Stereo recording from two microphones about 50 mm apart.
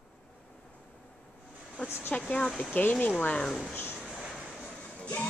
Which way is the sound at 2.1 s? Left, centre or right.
Left.